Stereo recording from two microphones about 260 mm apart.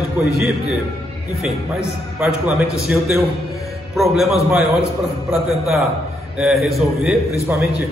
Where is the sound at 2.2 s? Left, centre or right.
Centre.